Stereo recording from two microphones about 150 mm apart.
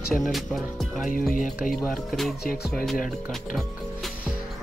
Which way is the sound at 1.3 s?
70° left (ahead or behind).